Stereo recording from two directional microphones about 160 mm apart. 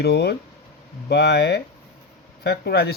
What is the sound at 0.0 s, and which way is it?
Speech, 90° left.